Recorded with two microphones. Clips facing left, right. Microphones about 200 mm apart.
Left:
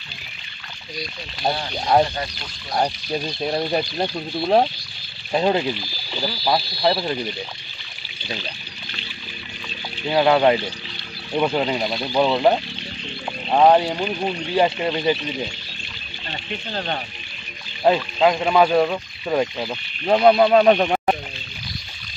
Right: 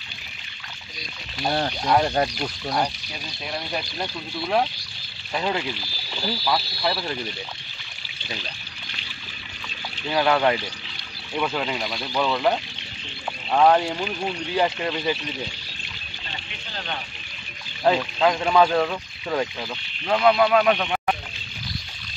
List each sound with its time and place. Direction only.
1.6 s speech: 50° right (ahead or behind)
2.8 s speech: 40° left (ahead or behind)
10.0 s speech: 20° left (ahead or behind)
16.7 s speech: 40° left (ahead or behind)
17.8 s speech: 20° left (ahead or behind); by 21.2 s 35° left (ahead or behind)